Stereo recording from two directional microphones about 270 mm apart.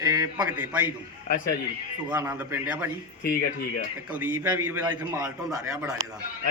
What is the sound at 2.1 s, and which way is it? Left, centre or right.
Speech, centre.